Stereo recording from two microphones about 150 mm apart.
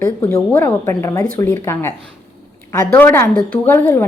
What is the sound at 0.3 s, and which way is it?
A woman's voice, 20° left (ahead or behind).